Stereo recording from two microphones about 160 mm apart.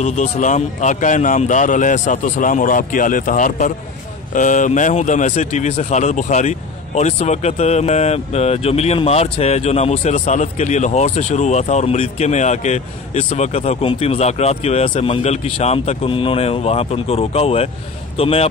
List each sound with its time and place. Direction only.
0.0 s speech: 50° left (ahead or behind)